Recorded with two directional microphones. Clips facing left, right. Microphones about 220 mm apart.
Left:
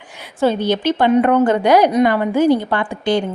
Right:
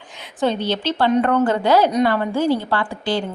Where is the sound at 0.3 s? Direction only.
10° left (ahead or behind).